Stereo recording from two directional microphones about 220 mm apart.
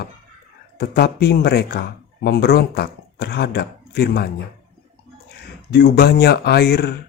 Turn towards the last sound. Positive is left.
turn(degrees=45)  # may be behind; listen again after turning